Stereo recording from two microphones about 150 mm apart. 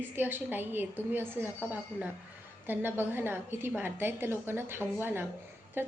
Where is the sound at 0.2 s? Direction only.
15° right (ahead or behind).